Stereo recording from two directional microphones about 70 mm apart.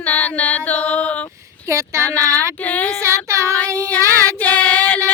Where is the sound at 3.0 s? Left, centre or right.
Right.